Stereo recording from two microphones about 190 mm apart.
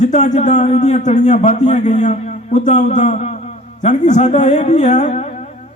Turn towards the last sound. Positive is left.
turn(degrees=35)  # may be behind; listen again after turning